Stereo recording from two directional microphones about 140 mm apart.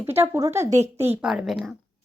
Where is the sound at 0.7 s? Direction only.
50° right (ahead or behind).